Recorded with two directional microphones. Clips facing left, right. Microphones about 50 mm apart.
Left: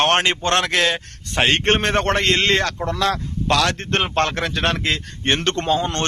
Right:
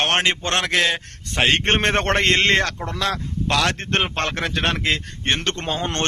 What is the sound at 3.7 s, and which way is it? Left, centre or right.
A man's voice, centre.